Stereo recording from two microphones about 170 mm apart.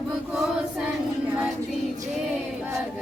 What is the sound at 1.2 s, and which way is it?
Child singing, 10° right (ahead or behind).